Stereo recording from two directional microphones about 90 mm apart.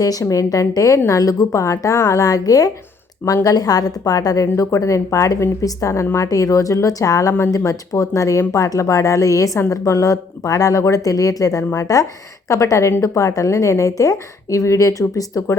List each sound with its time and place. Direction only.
0.0 s a woman's voice: 40° left (ahead or behind)